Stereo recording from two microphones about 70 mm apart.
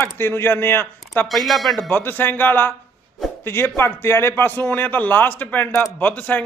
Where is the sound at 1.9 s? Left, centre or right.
Left.